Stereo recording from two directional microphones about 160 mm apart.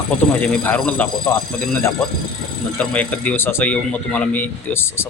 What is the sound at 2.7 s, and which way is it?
A man's voice, 10° left (ahead or behind).